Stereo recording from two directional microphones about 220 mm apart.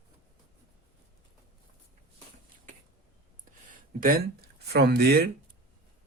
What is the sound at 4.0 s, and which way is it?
Speech, 40° right (ahead or behind).